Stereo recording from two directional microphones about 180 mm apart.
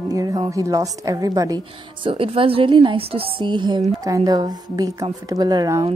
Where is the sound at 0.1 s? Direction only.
20° right (ahead or behind).